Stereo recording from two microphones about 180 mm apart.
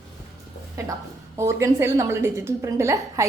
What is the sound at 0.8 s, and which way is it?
A woman's voice, 15° right (ahead or behind).